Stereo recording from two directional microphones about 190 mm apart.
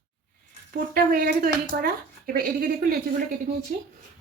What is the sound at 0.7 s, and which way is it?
Speech, 50° right (ahead or behind).